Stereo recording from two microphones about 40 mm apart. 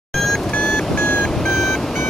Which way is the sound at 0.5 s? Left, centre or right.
Left.